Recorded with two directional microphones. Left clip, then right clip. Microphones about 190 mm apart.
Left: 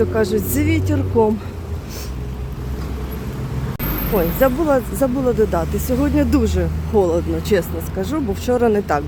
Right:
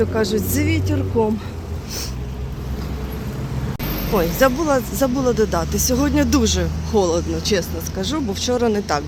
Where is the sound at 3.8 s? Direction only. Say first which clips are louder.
Left 1 dB; 70° left (ahead or behind).